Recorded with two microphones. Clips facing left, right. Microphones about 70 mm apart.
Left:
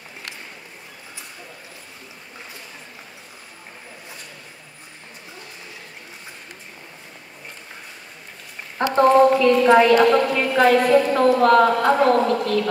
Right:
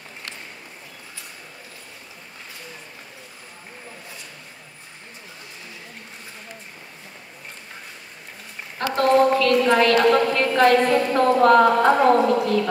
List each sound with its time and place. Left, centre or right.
8.7 s a woman's voice: left; by 12.6 s centre